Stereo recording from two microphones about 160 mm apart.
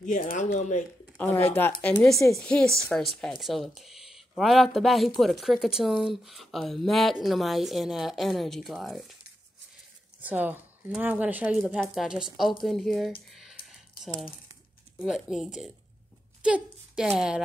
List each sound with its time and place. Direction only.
0.0 s speech: 55° left (ahead or behind)
1.1 s speech: 10° left (ahead or behind)
10.2 s speech: 10° right (ahead or behind)
11.6 s speech: centre (ahead or behind)
13.3 s a sound: centre (ahead or behind)
15.0 s a woman's voice: centre (ahead or behind)